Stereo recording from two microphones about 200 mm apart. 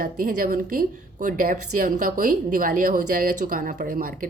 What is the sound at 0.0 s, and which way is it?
A woman's voice, 45° right (ahead or behind).